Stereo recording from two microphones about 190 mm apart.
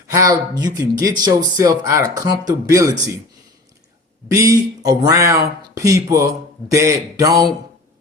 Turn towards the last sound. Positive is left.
turn(degrees=-20)  # may be behind; listen again after turning